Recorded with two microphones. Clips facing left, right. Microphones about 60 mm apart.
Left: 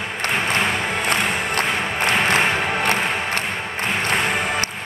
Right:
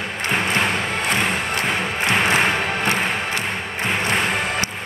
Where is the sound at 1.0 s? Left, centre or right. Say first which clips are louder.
Even; left.